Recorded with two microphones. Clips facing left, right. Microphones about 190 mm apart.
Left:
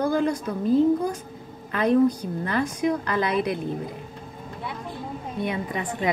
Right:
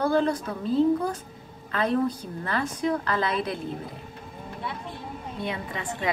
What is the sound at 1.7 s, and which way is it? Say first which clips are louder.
A woman's voice: left 5 dB; 15° left (ahead or behind).